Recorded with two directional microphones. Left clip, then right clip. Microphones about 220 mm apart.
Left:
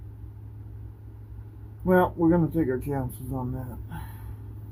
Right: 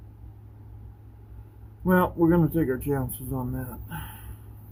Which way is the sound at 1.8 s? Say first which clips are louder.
Left 1 dB; 55° right (ahead or behind).